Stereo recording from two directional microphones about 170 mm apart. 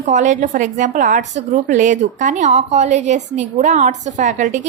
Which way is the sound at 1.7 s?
50° right (ahead or behind).